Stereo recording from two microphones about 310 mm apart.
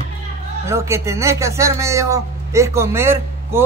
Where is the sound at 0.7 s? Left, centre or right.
Centre.